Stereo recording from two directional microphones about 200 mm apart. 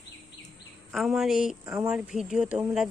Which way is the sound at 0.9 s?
Centre (ahead or behind).